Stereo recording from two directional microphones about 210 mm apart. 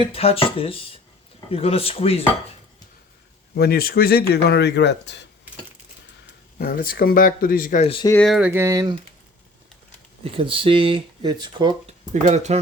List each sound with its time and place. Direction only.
0.0 s speech: 30° left (ahead or behind)
3.5 s speech: 50° left (ahead or behind)
6.6 s speech: 45° left (ahead or behind)
7.9 s speech: 25° left (ahead or behind)
8.1 s speech: centre (ahead or behind); by 9.0 s 15° right (ahead or behind)
10.2 s speech: 25° right (ahead or behind)
12.1 s speech: 35° right (ahead or behind)